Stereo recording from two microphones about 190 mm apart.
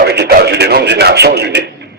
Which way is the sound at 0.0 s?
60° right (ahead or behind).